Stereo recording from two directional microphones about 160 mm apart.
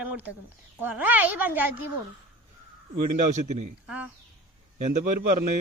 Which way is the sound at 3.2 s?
45° right (ahead or behind).